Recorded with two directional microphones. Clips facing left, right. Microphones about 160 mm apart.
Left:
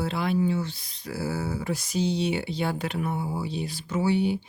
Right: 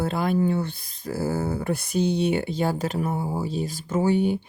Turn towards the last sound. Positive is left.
turn(degrees=-50)  # may be behind; listen again after turning